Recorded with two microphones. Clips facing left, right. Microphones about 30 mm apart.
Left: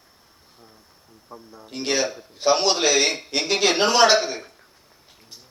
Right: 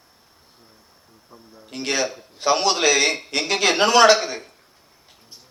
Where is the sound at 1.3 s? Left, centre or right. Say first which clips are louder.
Left 1 dB; centre.